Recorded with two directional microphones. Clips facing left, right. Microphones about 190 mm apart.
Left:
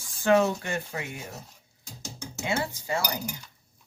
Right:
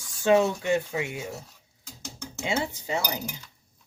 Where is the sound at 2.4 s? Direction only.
20° right (ahead or behind).